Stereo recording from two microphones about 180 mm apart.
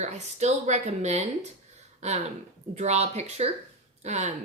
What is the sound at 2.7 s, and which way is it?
Speech, 40° right (ahead or behind).